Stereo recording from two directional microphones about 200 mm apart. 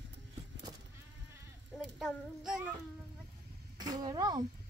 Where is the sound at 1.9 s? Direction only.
5° right (ahead or behind).